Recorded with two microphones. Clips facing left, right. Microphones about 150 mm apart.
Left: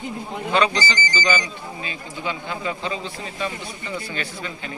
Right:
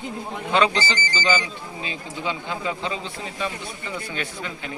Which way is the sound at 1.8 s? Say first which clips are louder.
Right 1 dB; 20° right (ahead or behind).